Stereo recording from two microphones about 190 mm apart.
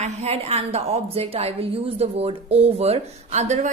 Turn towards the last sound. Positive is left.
turn(degrees=-35)  # may be behind; listen again after turning